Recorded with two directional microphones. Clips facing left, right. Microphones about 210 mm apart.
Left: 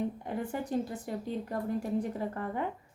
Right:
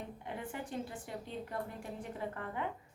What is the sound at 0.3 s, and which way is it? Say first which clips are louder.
A woman's voice: left 8 dB; 40° left (ahead or behind).